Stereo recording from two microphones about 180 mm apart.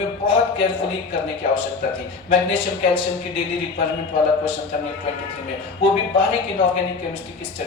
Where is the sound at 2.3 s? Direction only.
30° left (ahead or behind).